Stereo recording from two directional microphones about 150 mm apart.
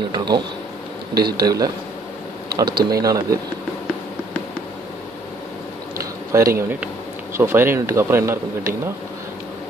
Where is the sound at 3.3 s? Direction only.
25° right (ahead or behind).